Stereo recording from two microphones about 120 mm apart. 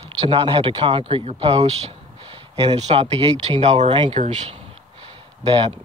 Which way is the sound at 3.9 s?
45° right (ahead or behind).